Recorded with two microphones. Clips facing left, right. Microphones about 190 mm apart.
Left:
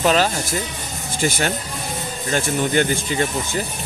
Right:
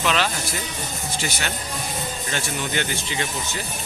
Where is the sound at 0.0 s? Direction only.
40° left (ahead or behind).